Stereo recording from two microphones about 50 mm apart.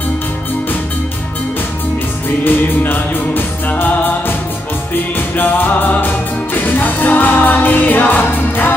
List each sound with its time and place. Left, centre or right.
2.4 s music: left